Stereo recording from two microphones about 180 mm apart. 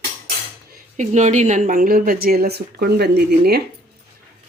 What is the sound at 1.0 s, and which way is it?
Speech, 40° right (ahead or behind).